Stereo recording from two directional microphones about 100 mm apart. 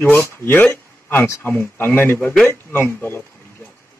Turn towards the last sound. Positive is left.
turn(degrees=25)  # may be behind; listen again after turning